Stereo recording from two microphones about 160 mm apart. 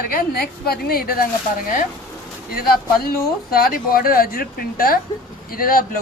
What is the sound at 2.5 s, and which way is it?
A woman's voice, 70° left (ahead or behind).